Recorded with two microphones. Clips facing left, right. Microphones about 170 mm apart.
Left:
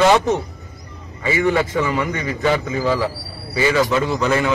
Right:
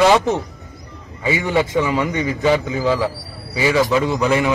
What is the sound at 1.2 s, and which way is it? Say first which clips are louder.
A man's voice: left 1 dB; 15° right (ahead or behind).